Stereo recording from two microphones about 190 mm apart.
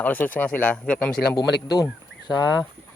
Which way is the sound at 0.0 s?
10° left (ahead or behind).